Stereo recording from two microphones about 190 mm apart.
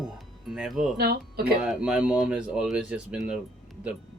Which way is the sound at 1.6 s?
5° right (ahead or behind).